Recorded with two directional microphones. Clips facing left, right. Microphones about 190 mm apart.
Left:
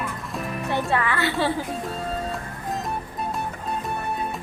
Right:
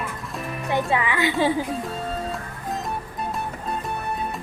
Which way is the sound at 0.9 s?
15° right (ahead or behind).